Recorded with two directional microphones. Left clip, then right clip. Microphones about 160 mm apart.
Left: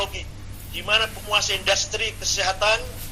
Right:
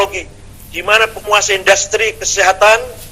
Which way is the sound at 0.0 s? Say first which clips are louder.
Right 12 dB; 50° right (ahead or behind).